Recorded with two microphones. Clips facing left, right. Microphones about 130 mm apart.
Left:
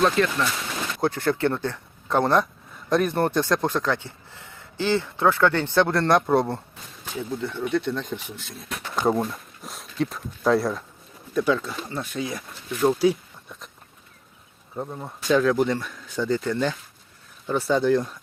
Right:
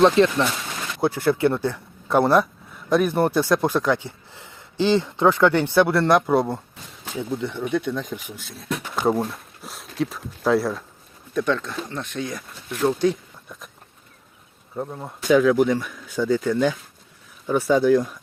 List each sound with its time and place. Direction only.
0.0 s speech: 30° right (ahead or behind)
1.0 s speech: 10° right (ahead or behind)
7.2 s speech: 15° right (ahead or behind); by 13.6 s 5° left (ahead or behind)
14.8 s speech: centre (ahead or behind)